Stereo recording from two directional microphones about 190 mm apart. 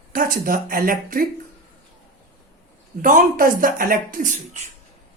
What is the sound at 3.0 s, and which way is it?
Speech, 45° right (ahead or behind).